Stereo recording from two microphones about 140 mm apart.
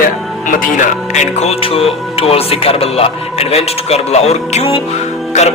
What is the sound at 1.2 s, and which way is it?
Speech, 50° left (ahead or behind).